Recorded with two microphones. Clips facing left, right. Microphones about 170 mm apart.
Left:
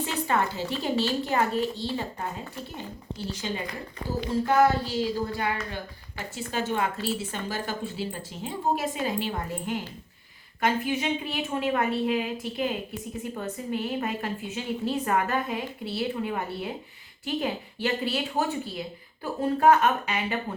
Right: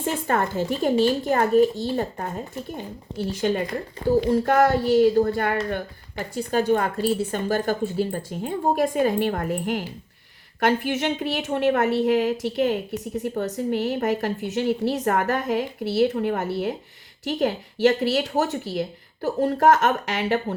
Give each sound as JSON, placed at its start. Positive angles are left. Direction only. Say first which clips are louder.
{"t": 0.0, "sound": "speech", "louder": "right 3 dB", "side_deg": -50}
{"t": 3.3, "sound": "speech", "louder": "right 12 dB", "side_deg": -55}
{"t": 6.1, "sound": "a woman's voice", "louder": "right 8 dB", "side_deg": -40}